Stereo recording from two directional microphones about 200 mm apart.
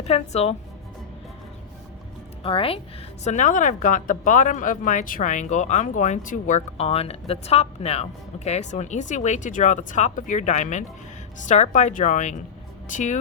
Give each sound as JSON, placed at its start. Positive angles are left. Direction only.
{"t": 0.0, "sound": "a woman's voice", "side_deg": 30}
{"t": 2.4, "sound": "a woman's voice", "side_deg": 25}
{"t": 3.2, "sound": "a woman's voice", "side_deg": 35}